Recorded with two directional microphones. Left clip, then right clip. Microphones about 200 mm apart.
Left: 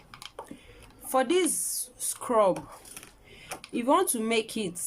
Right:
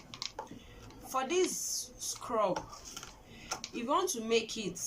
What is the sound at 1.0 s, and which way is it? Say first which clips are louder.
Speech: left 7 dB; 50° left (ahead or behind).